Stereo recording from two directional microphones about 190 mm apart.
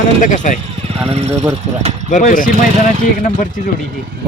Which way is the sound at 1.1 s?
35° right (ahead or behind).